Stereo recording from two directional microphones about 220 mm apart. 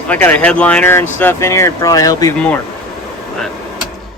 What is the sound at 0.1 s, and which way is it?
Speech, 5° left (ahead or behind).